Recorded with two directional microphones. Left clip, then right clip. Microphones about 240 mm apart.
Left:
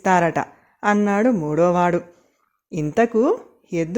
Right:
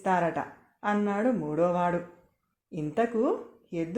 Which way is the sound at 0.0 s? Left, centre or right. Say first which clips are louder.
Left 9 dB; left.